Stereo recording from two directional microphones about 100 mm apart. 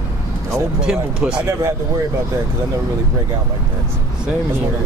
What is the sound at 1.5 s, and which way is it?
Speech, 30° right (ahead or behind).